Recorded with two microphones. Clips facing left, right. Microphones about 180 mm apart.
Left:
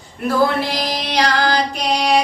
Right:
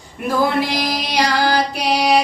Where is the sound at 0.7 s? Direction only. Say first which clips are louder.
Even; 10° right (ahead or behind).